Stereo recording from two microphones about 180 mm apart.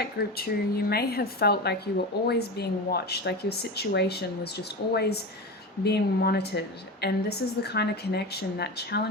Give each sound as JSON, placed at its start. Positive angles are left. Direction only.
{"t": 0.0, "sound": "a woman's voice", "side_deg": 60}